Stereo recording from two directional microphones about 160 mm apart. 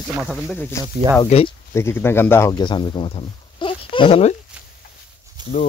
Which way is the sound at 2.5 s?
30° left (ahead or behind).